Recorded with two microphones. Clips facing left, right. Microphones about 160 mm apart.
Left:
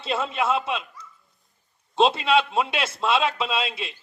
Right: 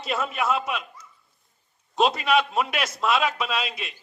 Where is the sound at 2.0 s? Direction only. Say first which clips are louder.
Left 2 dB; 25° left (ahead or behind).